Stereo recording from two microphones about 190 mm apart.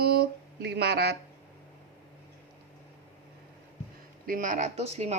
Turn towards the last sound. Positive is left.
turn(degrees=-35)  # may be behind; listen again after turning